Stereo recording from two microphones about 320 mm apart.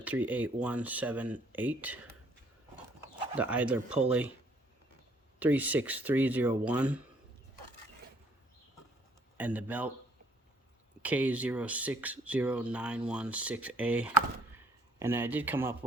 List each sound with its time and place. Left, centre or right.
0.0 s speech: centre
3.3 s speech: centre
5.4 s speech: centre
9.4 s speech: centre
11.0 s speech: centre